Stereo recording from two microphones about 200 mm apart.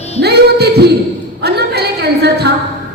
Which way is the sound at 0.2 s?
55° right (ahead or behind).